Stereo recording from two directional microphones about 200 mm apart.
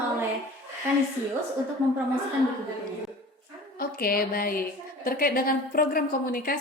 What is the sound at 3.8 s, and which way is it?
A woman's voice, 50° left (ahead or behind).